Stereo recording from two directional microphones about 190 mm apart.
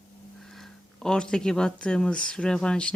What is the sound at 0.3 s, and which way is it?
Speech, centre (ahead or behind).